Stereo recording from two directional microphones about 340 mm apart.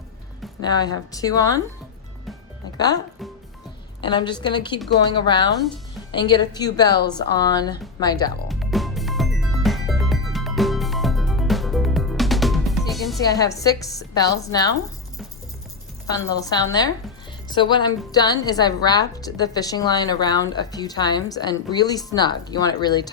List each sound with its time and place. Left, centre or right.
0.6 s a woman's voice: centre
2.7 s speech: centre
4.0 s a woman's voice: centre
8.4 s music: centre
13.2 s a woman's voice: centre
16.0 s a woman's voice: centre